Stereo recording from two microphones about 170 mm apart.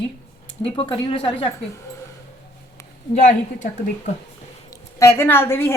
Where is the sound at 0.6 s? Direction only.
30° left (ahead or behind).